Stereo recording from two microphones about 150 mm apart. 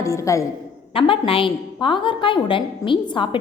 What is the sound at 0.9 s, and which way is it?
A woman's voice, 35° left (ahead or behind).